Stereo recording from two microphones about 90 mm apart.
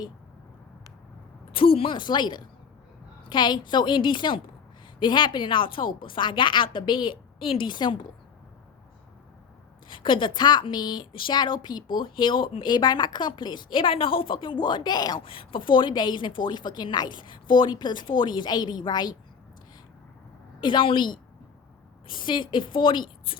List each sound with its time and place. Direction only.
1.5 s a woman's voice: 90° left; by 7.9 s 60° left (ahead or behind)
9.9 s a woman's voice: 70° left (ahead or behind); by 11.0 s 55° left (ahead or behind)
11.1 s a woman's voice: 65° left (ahead or behind); by 15.2 s 50° left (ahead or behind)
15.2 s a woman's voice: 75° left (ahead or behind); by 19.1 s 50° left (ahead or behind)
20.6 s a woman's voice: 65° left (ahead or behind)